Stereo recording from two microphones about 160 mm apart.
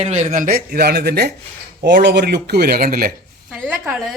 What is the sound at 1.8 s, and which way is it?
Speech, 90° right.